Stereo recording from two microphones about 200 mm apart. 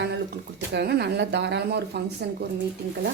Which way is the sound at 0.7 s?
55° right (ahead or behind).